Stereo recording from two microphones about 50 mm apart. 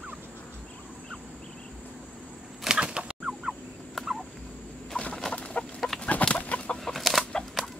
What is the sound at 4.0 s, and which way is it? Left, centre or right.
Turkey, centre.